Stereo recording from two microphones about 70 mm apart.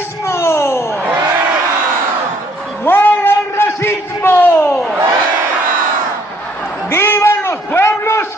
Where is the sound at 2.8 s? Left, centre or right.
Left.